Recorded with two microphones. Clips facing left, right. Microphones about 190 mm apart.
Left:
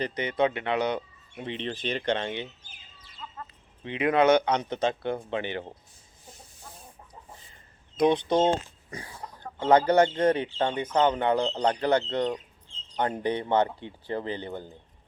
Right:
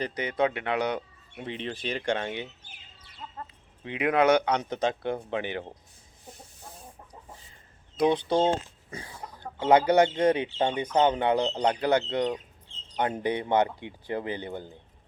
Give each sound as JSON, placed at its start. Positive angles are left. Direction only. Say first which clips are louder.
{"t": 0.0, "sound": "speech", "louder": "left 1 dB", "side_deg": -10}
{"t": 3.2, "sound": "chicken", "louder": "even", "side_deg": -40}
{"t": 3.8, "sound": "speech", "louder": "left 1 dB", "side_deg": -10}
{"t": 8.0, "sound": "speech", "louder": "left 1 dB", "side_deg": 15}
{"t": 9.4, "sound": "speech", "louder": "even", "side_deg": -10}